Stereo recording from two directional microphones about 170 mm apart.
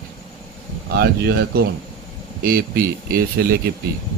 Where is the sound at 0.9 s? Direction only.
65° right (ahead or behind).